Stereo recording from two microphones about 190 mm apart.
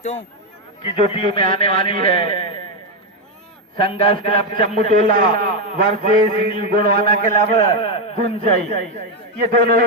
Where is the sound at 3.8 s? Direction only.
30° left (ahead or behind).